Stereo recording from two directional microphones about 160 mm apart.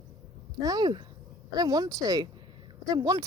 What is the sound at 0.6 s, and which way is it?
Speech, 25° right (ahead or behind).